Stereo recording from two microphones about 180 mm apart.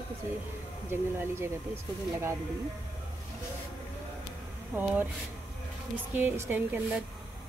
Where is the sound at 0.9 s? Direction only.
15° right (ahead or behind).